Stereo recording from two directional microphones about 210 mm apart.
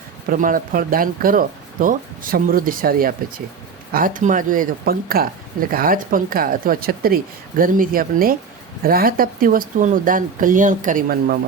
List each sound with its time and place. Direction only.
0.3 s speech: 40° right (ahead or behind)